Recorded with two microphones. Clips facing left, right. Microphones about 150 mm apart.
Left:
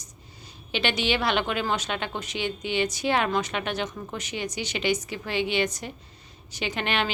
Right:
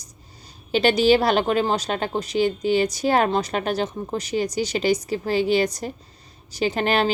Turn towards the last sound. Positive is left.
turn(degrees=-40)  # may be behind; listen again after turning